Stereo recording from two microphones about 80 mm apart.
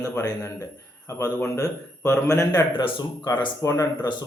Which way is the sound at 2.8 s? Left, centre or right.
Left.